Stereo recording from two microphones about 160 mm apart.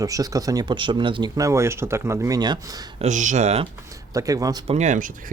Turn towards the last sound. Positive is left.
turn(degrees=-50)  # may be behind; listen again after turning